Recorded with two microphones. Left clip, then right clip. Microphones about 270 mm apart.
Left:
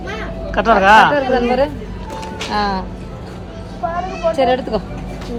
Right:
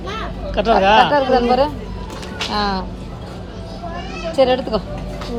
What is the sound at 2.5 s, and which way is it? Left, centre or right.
Speech, centre.